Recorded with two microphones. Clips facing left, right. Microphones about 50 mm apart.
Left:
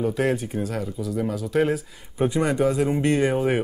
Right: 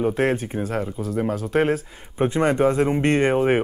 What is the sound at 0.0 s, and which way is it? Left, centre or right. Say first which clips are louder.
Speech: right 2 dB; right.